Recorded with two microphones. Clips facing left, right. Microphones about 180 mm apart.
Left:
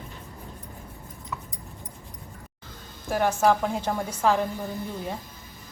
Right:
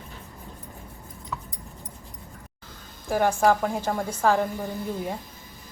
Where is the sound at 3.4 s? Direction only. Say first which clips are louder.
Right 1 dB; 10° right (ahead or behind).